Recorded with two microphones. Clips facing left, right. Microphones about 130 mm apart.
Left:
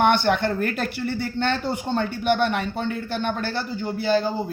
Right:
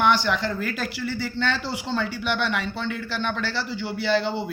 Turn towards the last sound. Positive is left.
turn(degrees=-70)  # may be behind; listen again after turning